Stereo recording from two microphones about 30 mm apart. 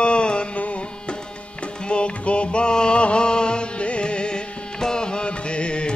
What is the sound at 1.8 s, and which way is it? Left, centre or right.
Music, left.